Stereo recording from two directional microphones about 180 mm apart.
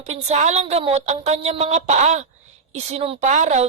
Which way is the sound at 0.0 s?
40° right (ahead or behind).